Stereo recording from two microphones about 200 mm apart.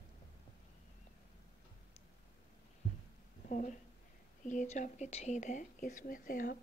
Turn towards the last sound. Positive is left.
turn(degrees=45)  # may be behind; listen again after turning